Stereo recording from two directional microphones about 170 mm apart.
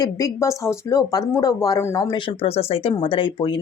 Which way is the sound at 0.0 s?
20° left (ahead or behind).